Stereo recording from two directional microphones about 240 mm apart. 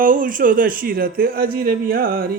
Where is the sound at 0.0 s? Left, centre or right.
Right.